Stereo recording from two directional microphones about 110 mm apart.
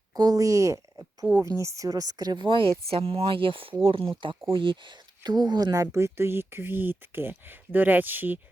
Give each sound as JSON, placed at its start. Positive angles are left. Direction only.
{"t": 0.1, "sound": "a woman's voice", "side_deg": -35}
{"t": 2.9, "sound": "speech", "side_deg": -60}